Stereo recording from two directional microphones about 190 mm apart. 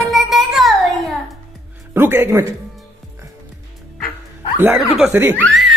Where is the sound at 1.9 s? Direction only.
10° right (ahead or behind).